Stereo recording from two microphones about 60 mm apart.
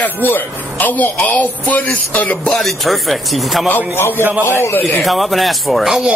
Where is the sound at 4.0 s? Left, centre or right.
Left.